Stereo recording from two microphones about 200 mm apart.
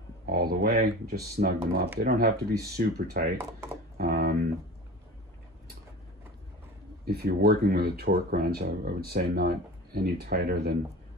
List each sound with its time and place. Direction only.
0.3 s speech: 50° right (ahead or behind)
4.0 s a sound: 50° right (ahead or behind)
7.1 s speech: 50° right (ahead or behind)